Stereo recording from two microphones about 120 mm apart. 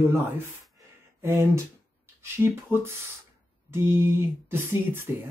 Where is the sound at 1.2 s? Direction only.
20° right (ahead or behind).